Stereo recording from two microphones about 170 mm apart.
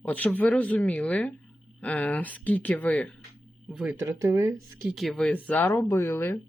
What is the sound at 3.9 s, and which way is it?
Speech, 15° right (ahead or behind).